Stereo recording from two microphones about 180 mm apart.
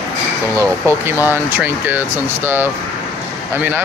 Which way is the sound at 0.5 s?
15° right (ahead or behind).